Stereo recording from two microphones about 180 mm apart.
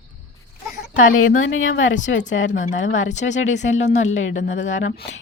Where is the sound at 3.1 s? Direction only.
40° left (ahead or behind).